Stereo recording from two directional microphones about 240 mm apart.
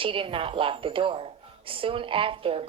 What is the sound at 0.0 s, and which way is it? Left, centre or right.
A woman's voice, right.